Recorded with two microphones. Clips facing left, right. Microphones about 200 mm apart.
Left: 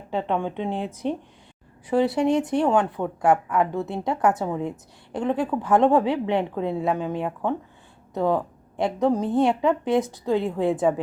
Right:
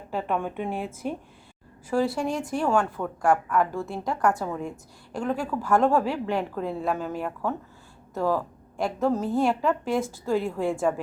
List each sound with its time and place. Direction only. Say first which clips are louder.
0.2 s a woman's voice: left 3 dB; 20° left (ahead or behind)
0.5 s speech: left 3 dB; 10° right (ahead or behind)
1.9 s a woman's voice: left 5 dB; 20° left (ahead or behind)